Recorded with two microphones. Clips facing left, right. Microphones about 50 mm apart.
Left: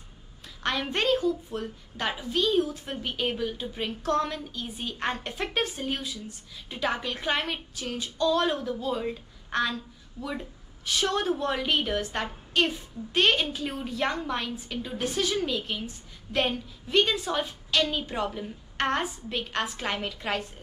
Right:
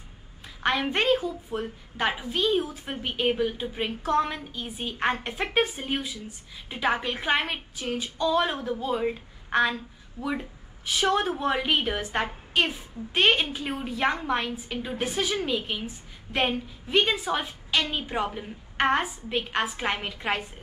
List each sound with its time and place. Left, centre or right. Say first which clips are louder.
0.6 s a woman's voice: right 3 dB; centre
10.9 s a woman's voice: right 2 dB; centre